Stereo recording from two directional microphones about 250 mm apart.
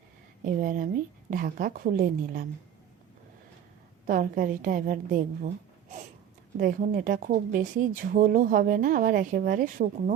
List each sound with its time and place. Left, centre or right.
0.4 s speech: right
4.0 s speech: right
6.6 s speech: right